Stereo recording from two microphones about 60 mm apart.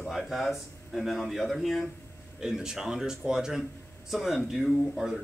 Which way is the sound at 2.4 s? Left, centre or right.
Centre.